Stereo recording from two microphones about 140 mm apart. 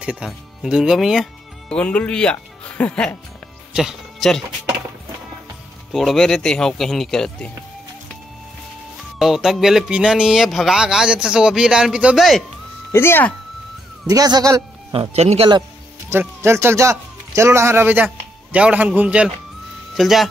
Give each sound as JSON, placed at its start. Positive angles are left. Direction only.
{"t": 0.0, "sound": "speech", "side_deg": -5}
{"t": 5.9, "sound": "speech", "side_deg": 0}
{"t": 9.2, "sound": "speech", "side_deg": -5}
{"t": 12.9, "sound": "speech", "side_deg": 15}
{"t": 14.0, "sound": "speech", "side_deg": -25}
{"t": 14.9, "sound": "speech", "side_deg": -45}
{"t": 16.1, "sound": "speech", "side_deg": -20}